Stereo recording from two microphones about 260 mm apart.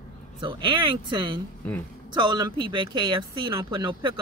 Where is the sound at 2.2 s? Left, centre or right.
Centre.